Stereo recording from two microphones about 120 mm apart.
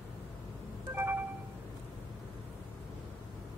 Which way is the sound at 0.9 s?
20° right (ahead or behind).